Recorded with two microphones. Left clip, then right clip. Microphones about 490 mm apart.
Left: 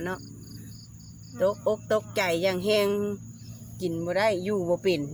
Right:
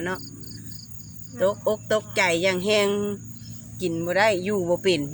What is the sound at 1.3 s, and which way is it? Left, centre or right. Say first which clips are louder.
Speech: right 2 dB; left.